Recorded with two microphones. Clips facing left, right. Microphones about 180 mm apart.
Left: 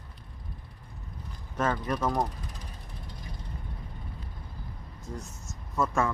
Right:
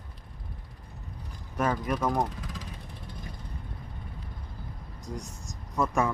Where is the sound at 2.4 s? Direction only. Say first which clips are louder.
Right 4 dB; 90° right.